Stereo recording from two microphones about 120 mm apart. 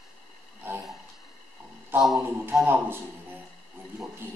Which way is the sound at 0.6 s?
20° right (ahead or behind).